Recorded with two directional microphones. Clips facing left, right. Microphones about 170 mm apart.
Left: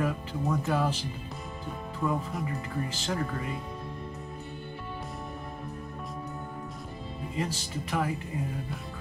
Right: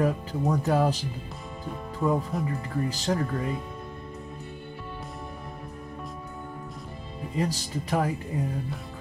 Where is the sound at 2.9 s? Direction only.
40° right (ahead or behind).